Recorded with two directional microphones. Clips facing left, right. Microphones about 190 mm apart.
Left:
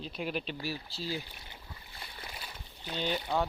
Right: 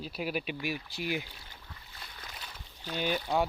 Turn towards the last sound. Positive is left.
turn(degrees=-15)  # may be behind; listen again after turning